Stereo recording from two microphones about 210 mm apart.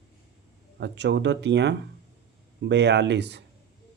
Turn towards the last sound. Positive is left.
turn(degrees=-55)  # may be behind; listen again after turning